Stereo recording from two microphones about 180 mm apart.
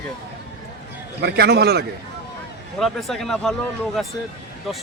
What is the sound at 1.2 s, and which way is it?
Speech, 65° right (ahead or behind).